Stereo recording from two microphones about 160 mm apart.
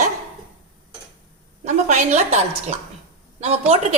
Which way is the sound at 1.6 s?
50° right (ahead or behind).